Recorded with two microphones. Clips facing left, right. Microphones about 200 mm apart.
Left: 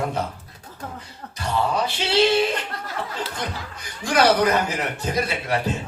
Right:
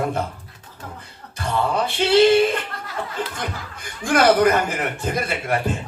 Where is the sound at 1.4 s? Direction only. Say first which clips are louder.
Right 1 dB; 55° right (ahead or behind).